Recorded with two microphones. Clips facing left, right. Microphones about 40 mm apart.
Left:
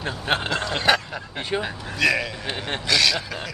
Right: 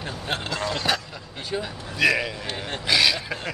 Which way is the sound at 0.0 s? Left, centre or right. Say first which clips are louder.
Left 5 dB; left.